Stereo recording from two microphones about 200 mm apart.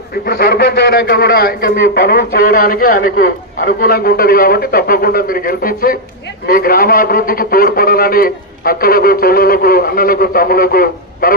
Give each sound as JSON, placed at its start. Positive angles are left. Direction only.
{"t": 0.3, "sound": "a man's voice", "side_deg": 50}